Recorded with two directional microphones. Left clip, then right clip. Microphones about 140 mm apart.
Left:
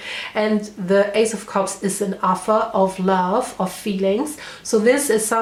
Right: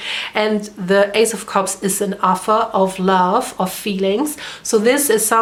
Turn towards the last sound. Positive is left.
turn(degrees=-30)  # may be behind; listen again after turning